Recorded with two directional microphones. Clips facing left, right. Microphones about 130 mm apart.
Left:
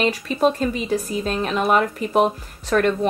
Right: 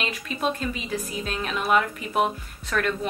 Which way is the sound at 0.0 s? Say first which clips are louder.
Left 9 dB; 35° left (ahead or behind).